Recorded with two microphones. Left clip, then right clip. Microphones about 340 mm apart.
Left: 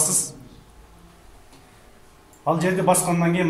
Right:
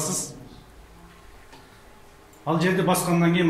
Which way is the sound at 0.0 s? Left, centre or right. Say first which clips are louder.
Left 4 dB; left.